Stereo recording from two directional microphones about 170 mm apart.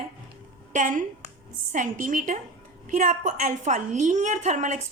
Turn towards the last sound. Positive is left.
turn(degrees=-45)  # may be behind; listen again after turning